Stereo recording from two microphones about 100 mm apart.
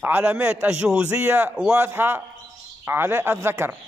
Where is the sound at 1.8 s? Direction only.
20° right (ahead or behind).